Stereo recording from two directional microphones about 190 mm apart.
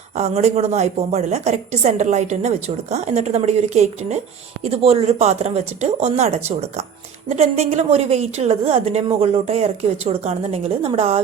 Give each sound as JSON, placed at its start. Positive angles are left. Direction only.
{"t": 0.1, "sound": "a woman's voice", "side_deg": -35}